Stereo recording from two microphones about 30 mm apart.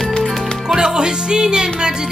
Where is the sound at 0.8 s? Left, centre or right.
Right.